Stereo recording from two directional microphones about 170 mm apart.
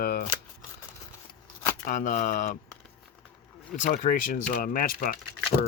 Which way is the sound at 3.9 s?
50° left (ahead or behind).